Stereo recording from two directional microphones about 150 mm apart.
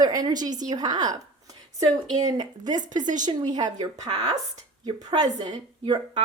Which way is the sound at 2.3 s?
25° right (ahead or behind).